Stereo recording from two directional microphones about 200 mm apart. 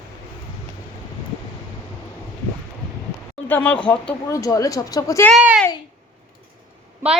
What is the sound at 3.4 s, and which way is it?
Speech, 10° left (ahead or behind).